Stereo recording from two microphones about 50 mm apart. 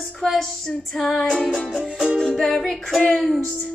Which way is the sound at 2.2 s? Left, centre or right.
Centre.